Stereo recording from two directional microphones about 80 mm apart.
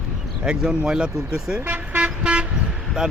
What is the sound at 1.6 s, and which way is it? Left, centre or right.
Toot, right.